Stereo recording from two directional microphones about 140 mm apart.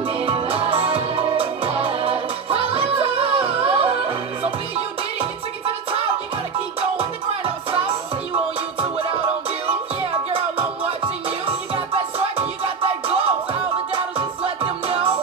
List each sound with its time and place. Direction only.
0.2 s music: 40° right (ahead or behind)
6.8 s music: 45° right (ahead or behind)
11.4 s music: 45° right (ahead or behind)
13.9 s music: 40° right (ahead or behind)